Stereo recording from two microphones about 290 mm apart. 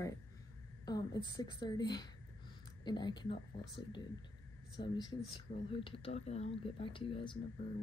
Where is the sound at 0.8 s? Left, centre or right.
Centre.